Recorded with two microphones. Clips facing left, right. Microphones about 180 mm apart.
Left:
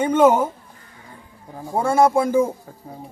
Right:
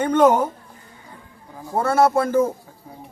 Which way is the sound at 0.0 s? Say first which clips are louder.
Left 1 dB; 10° left (ahead or behind).